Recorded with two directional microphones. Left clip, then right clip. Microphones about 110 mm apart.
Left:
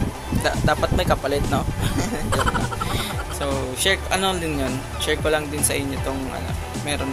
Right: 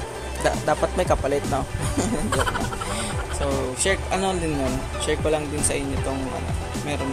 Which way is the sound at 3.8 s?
15° right (ahead or behind).